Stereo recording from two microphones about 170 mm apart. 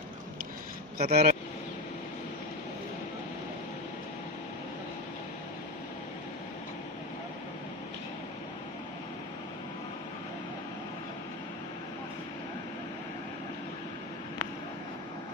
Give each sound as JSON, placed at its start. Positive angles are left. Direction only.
{"t": 0.9, "sound": "speech", "side_deg": -65}